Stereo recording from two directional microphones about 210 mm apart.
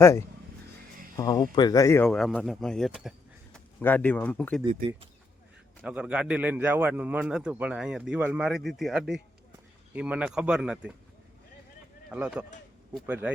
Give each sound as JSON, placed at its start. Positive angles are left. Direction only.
{"t": 0.0, "sound": "speech", "side_deg": 15}
{"t": 2.0, "sound": "speech", "side_deg": 0}
{"t": 3.8, "sound": "speech", "side_deg": 10}
{"t": 5.8, "sound": "a man's voice", "side_deg": -5}
{"t": 12.1, "sound": "a man's voice", "side_deg": -5}